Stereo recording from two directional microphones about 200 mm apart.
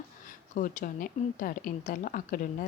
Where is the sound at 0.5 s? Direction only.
45° left (ahead or behind).